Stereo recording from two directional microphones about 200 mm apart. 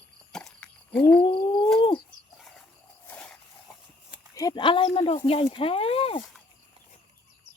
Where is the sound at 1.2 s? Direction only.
25° left (ahead or behind).